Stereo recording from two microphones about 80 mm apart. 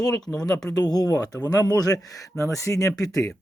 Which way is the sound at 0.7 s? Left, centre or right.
Left.